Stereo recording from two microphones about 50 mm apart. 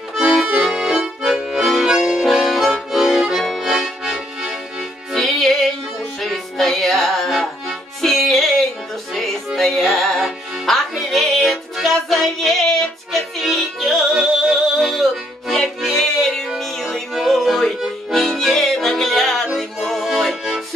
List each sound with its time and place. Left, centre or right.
0.1 s accordion: centre
2.3 s accordion: centre
5.1 s music: centre